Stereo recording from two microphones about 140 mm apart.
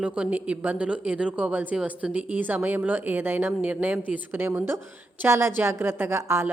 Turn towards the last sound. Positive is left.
turn(degrees=-20)  # may be behind; listen again after turning